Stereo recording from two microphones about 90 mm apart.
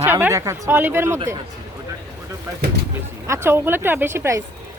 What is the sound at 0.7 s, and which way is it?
Speech, 20° right (ahead or behind).